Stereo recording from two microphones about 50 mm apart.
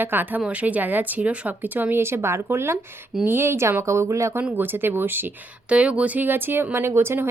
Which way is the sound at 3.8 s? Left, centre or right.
Right.